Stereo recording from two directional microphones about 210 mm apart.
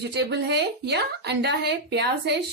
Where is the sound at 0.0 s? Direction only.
55° right (ahead or behind).